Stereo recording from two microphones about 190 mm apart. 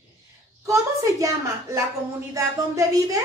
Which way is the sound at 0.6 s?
15° right (ahead or behind).